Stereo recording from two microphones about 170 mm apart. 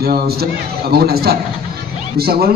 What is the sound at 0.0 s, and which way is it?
A man's voice, 65° right (ahead or behind).